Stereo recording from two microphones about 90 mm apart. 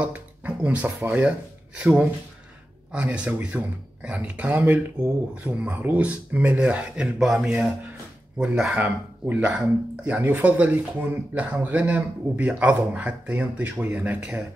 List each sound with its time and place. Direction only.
0.0 s speech: 15° right (ahead or behind)
2.9 s speech: 15° right (ahead or behind)
8.7 s speech: 20° right (ahead or behind)